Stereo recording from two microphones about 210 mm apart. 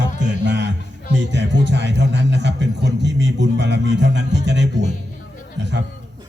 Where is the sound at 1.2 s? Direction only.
55° right (ahead or behind).